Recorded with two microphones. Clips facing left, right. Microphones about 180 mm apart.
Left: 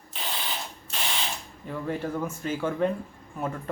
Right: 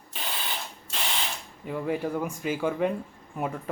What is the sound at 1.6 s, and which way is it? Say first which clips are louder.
Speech: right 2 dB; 10° right (ahead or behind).